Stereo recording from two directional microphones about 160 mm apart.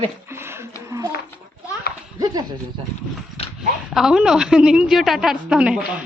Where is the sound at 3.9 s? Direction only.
5° right (ahead or behind).